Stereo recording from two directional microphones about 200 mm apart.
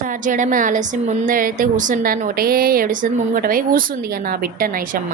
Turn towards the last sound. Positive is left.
turn(degrees=-45)  # may be behind; listen again after turning